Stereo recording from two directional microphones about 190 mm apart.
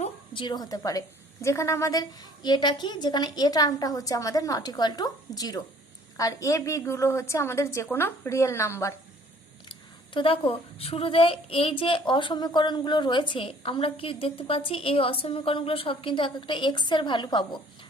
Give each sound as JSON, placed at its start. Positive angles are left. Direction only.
{"t": 0.0, "sound": "a woman's voice", "side_deg": 25}
{"t": 10.2, "sound": "a woman's voice", "side_deg": 30}